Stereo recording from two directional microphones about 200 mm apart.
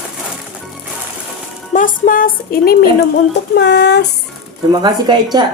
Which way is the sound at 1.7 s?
40° left (ahead or behind).